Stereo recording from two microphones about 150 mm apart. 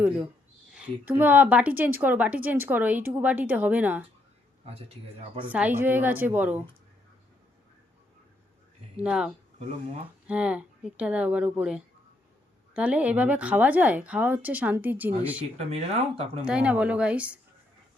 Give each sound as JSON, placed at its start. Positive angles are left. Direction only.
{"t": 0.7, "sound": "a woman's voice", "side_deg": -10}
{"t": 5.5, "sound": "a woman's voice", "side_deg": -10}
{"t": 9.0, "sound": "a woman's voice", "side_deg": -5}
{"t": 15.5, "sound": "speech", "side_deg": -45}
{"t": 16.4, "sound": "a woman's voice", "side_deg": -5}